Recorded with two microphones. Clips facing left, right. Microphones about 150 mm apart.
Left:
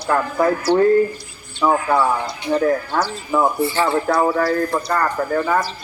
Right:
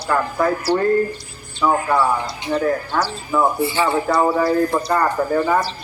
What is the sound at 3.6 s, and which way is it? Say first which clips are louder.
Speech: even; 10° right (ahead or behind).